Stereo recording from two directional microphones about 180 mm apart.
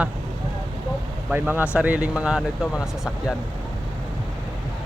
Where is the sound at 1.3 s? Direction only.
10° right (ahead or behind).